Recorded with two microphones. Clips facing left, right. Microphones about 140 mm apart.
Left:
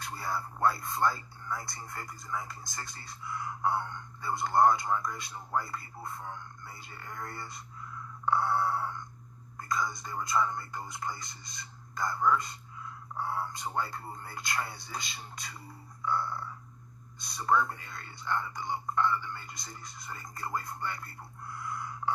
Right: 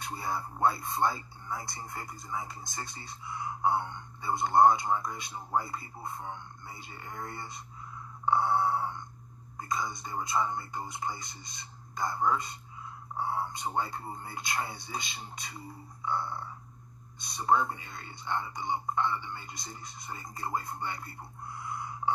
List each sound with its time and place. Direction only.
0.0 s speech: 25° right (ahead or behind)